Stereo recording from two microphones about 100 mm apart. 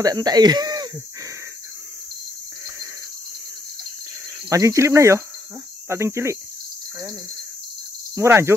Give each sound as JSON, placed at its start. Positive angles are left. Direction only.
{"t": 0.0, "sound": "speech", "side_deg": -40}
{"t": 4.5, "sound": "speech", "side_deg": -30}
{"t": 8.1, "sound": "speech", "side_deg": -25}